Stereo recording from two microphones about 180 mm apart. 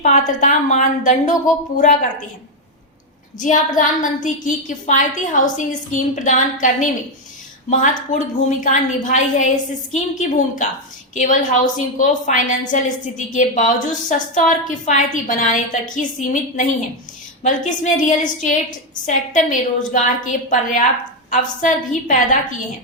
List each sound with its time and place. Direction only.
0.0 s a woman's voice: 45° left (ahead or behind)
3.8 s a woman's voice: 45° left (ahead or behind)
8.1 s a woman's voice: 45° left (ahead or behind)